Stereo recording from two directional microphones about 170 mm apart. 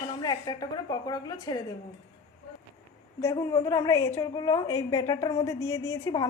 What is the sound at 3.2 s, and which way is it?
A woman's voice, 20° left (ahead or behind).